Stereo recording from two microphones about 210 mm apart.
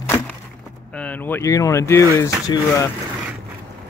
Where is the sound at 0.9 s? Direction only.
5° left (ahead or behind).